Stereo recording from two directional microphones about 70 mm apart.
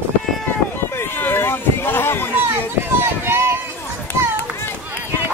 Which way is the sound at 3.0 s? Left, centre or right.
Right.